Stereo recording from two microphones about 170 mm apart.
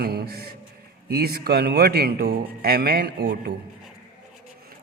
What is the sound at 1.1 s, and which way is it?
Speech, 65° right (ahead or behind).